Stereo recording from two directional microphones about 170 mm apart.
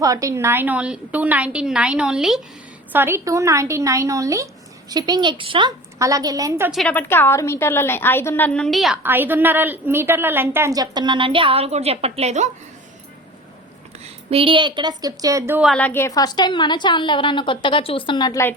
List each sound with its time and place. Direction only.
0.0 s a woman's voice: 20° right (ahead or behind)
6.7 s a woman's voice: centre (ahead or behind)
6.9 s a woman's voice: 10° left (ahead or behind)
9.0 s a woman's voice: 10° right (ahead or behind); by 12.5 s 40° right (ahead or behind)
14.0 s a woman's voice: 35° right (ahead or behind); by 15.6 s 15° right (ahead or behind)
15.6 s a woman's voice: 5° left (ahead or behind); by 18.4 s 25° left (ahead or behind)